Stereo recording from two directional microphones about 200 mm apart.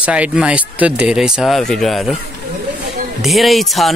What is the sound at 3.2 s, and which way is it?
Speech, centre (ahead or behind).